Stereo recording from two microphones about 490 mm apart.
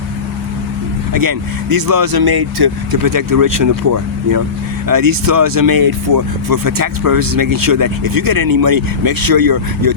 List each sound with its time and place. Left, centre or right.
1.1 s speech: right